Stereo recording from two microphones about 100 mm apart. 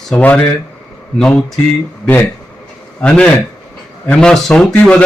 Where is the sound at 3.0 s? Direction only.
10° left (ahead or behind).